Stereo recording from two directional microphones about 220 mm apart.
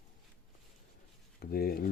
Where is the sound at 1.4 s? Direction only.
45° left (ahead or behind).